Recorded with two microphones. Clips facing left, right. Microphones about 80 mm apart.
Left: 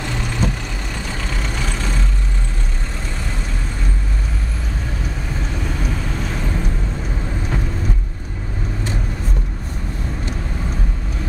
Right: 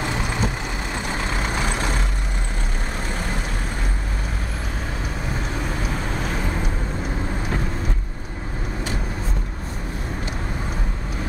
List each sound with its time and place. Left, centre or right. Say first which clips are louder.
0.0 s vehicle: left 1 dB; centre